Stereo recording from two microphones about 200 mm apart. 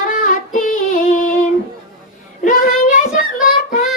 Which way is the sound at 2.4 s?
40° left (ahead or behind).